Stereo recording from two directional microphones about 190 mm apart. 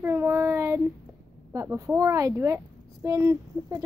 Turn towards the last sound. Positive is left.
turn(degrees=-15)  # may be behind; listen again after turning